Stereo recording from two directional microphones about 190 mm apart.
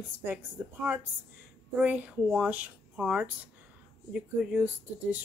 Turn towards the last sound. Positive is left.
turn(degrees=-10)  # may be behind; listen again after turning